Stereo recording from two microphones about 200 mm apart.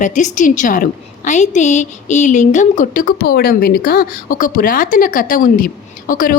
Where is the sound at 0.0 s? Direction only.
40° left (ahead or behind).